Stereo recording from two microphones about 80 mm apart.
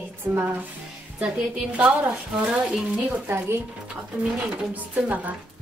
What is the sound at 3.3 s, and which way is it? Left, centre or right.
Speech, right.